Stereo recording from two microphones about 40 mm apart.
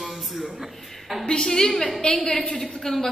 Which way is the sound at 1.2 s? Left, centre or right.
Centre.